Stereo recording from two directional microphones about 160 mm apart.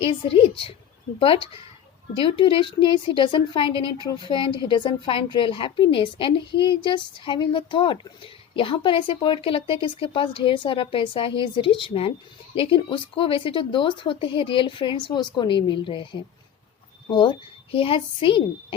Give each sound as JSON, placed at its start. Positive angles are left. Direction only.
{"t": 0.0, "sound": "a woman's voice", "side_deg": 35}